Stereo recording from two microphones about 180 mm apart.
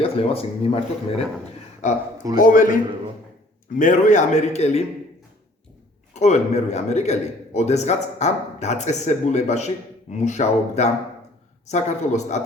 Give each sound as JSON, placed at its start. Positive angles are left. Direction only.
{"t": 0.0, "sound": "a man's voice", "side_deg": 30}
{"t": 2.4, "sound": "a man's voice", "side_deg": 50}
{"t": 3.8, "sound": "a man's voice", "side_deg": 45}
{"t": 6.1, "sound": "a man's voice", "side_deg": 40}